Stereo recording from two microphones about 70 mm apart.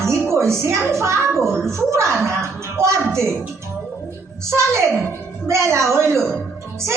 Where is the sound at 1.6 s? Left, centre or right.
Right.